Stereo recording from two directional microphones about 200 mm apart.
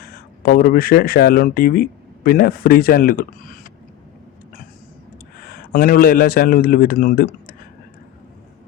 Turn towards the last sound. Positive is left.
turn(degrees=45)  # may be behind; listen again after turning